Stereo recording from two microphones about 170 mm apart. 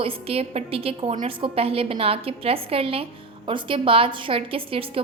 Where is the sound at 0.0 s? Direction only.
35° right (ahead or behind).